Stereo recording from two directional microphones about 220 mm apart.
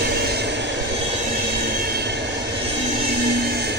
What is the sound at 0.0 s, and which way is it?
Vehicle, 45° right (ahead or behind).